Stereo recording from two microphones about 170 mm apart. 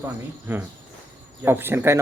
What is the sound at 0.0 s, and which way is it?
Speech, 10° right (ahead or behind).